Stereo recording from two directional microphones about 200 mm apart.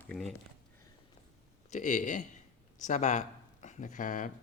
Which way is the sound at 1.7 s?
40° left (ahead or behind).